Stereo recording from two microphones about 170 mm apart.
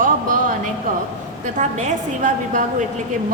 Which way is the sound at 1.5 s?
45° right (ahead or behind).